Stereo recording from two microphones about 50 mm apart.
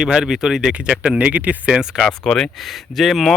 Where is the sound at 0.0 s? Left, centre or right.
Centre.